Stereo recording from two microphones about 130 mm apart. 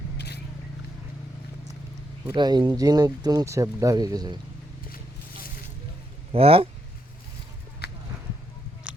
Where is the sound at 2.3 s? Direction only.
35° right (ahead or behind).